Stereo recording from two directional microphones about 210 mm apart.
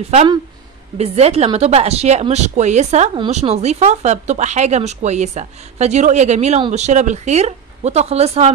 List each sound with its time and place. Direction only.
0.9 s speech: 30° right (ahead or behind)